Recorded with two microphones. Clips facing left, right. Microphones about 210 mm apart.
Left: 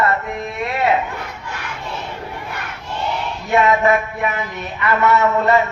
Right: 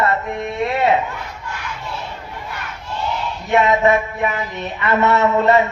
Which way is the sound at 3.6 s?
25° right (ahead or behind).